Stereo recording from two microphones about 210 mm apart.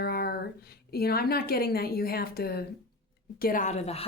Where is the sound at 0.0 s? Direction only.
45° left (ahead or behind).